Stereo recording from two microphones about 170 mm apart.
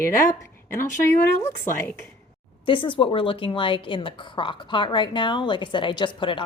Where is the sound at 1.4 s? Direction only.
15° left (ahead or behind).